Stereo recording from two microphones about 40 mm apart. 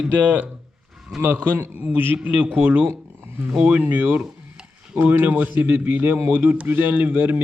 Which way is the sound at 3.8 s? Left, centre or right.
Right.